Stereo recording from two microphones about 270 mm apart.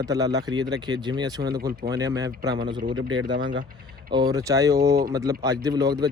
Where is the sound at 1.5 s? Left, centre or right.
Right.